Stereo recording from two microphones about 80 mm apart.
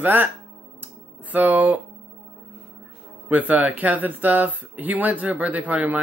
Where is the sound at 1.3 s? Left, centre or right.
Right.